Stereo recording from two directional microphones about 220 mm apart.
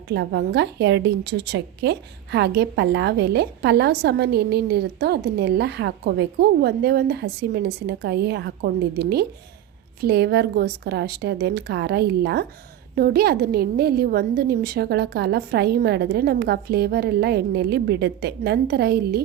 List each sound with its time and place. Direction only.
0.1 s a woman's voice: 50° right (ahead or behind)